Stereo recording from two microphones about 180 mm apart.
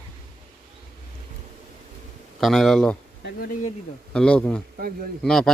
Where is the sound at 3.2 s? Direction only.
55° left (ahead or behind).